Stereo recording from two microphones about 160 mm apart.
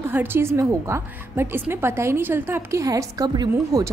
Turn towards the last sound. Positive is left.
turn(degrees=-20)  # may be behind; listen again after turning